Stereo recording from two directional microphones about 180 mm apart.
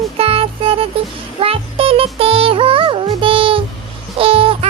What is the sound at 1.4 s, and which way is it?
Music, 30° right (ahead or behind).